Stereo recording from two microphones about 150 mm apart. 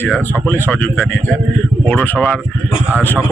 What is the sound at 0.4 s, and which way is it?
Speech, 10° left (ahead or behind).